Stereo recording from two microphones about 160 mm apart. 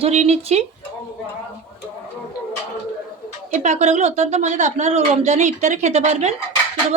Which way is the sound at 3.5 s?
45° right (ahead or behind).